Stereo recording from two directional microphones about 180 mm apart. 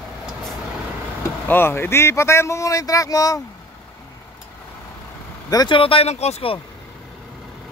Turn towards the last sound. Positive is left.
turn(degrees=35)  # may be behind; listen again after turning